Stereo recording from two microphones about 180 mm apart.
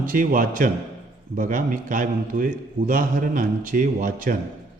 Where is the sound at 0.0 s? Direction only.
50° right (ahead or behind).